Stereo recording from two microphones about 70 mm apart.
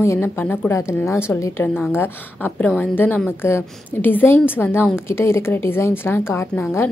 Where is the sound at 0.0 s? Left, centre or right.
Left.